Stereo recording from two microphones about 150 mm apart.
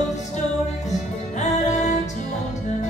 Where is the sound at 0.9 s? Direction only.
50° left (ahead or behind).